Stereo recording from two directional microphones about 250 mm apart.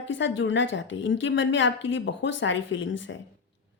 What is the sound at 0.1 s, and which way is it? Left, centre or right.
Speech, left.